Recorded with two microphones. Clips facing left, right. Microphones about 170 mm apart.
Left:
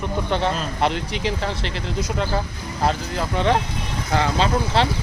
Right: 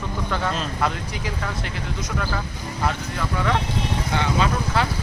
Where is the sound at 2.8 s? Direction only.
30° left (ahead or behind).